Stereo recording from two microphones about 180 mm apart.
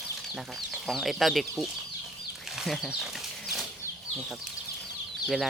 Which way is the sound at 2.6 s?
Centre (ahead or behind).